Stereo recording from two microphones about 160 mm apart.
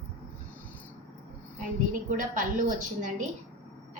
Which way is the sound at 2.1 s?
60° right (ahead or behind).